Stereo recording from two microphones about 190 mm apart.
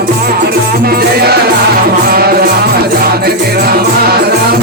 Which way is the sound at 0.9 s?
55° right (ahead or behind).